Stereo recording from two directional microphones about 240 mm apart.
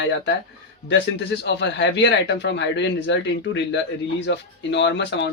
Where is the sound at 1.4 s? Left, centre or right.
Left.